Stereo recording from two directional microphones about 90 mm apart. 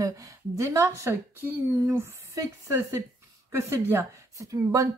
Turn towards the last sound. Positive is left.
turn(degrees=-40)  # may be behind; listen again after turning